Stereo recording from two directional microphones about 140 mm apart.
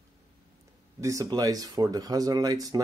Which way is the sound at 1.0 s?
25° right (ahead or behind).